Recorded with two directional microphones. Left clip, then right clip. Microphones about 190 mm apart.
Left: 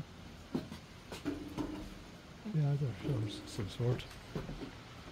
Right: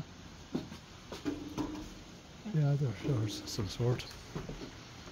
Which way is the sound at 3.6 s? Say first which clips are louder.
Right 2 dB; 25° right (ahead or behind).